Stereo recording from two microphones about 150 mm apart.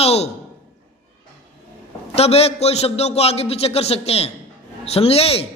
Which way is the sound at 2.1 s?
45° left (ahead or behind).